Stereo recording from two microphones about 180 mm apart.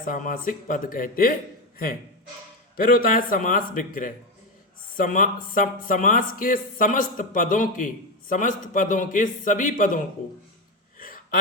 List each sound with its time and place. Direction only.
0.0 s speech: 45° left (ahead or behind)
2.7 s speech: 55° left (ahead or behind)
11.0 s gasp: 50° left (ahead or behind)